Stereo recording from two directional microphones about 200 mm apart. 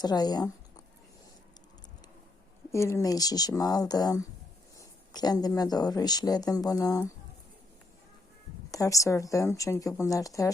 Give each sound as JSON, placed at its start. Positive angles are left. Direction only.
{"t": 0.0, "sound": "speech", "side_deg": 20}
{"t": 2.7, "sound": "speech", "side_deg": 15}
{"t": 8.7, "sound": "a woman's voice", "side_deg": 15}